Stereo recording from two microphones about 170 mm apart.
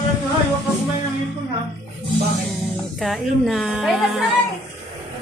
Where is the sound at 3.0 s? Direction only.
Centre (ahead or behind).